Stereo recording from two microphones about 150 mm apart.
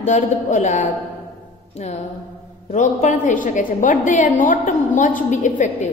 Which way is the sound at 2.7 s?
55° left (ahead or behind).